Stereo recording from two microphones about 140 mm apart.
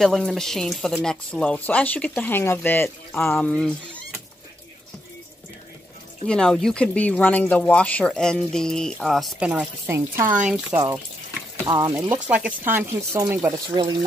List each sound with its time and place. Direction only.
0.0 s speech: centre (ahead or behind)
6.2 s speech: 5° left (ahead or behind)
9.8 s speech: 20° right (ahead or behind)
10.2 s speech: 65° right (ahead or behind)
11.6 s speech: 35° right (ahead or behind)
11.9 s speech: 15° right (ahead or behind)